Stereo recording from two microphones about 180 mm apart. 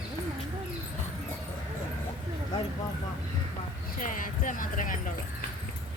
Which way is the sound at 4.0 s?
50° left (ahead or behind).